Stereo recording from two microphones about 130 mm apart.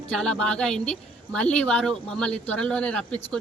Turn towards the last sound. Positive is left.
turn(degrees=5)  # may be behind; listen again after turning